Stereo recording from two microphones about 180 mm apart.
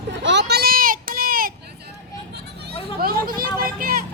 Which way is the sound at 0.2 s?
80° right.